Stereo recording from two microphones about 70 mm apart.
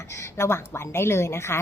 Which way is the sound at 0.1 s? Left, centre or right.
Left.